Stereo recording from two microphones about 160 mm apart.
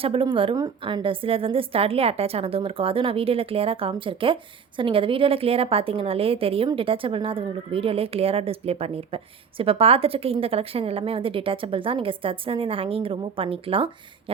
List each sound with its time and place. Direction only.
0.0 s speech: 35° right (ahead or behind)